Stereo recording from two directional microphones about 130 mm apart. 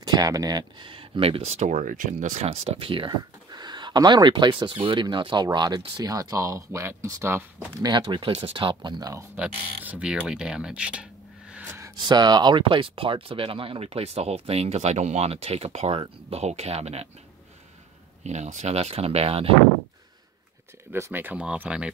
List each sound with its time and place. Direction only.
0.0 s speech: 30° right (ahead or behind)
7.8 s speech: 35° right (ahead or behind)
9.4 s speech: 10° right (ahead or behind)
12.0 s speech: 35° right (ahead or behind); by 17.1 s 55° right (ahead or behind)
18.2 s speech: 60° right (ahead or behind)
20.9 s speech: 15° right (ahead or behind)